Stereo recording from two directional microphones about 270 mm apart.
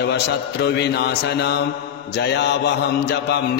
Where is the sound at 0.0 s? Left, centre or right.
Left.